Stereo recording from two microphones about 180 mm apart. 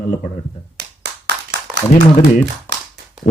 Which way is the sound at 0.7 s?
75° right (ahead or behind).